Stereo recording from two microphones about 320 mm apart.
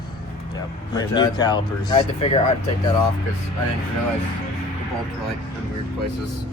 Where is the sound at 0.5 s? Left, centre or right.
Centre.